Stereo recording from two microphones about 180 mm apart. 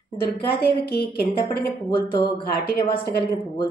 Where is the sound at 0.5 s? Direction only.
60° left (ahead or behind).